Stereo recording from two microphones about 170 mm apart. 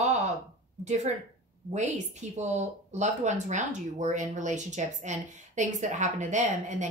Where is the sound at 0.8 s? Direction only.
45° right (ahead or behind).